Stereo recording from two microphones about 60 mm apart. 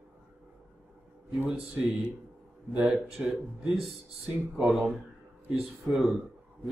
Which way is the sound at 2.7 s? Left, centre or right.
Right.